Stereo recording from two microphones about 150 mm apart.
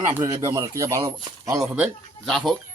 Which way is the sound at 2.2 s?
5° left (ahead or behind).